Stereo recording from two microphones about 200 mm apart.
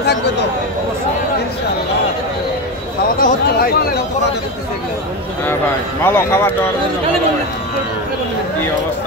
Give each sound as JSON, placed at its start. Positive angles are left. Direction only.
{"t": 3.2, "sound": "speech", "side_deg": 45}
{"t": 5.4, "sound": "speech", "side_deg": 10}